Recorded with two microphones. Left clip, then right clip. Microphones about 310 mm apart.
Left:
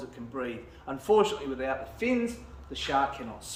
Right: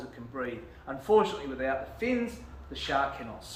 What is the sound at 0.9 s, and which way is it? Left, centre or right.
Speech, left.